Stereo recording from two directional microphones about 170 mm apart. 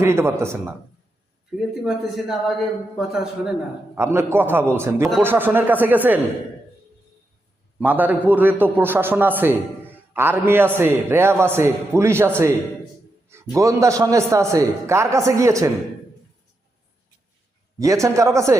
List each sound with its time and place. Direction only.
0.0 s a man's voice: 15° right (ahead or behind)
1.5 s a man's voice: centre (ahead or behind)
3.9 s a man's voice: 15° right (ahead or behind)
7.8 s a man's voice: 10° right (ahead or behind)
17.7 s a man's voice: 20° right (ahead or behind)